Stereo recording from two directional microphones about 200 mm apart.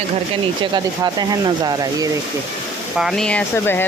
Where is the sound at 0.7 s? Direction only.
20° right (ahead or behind).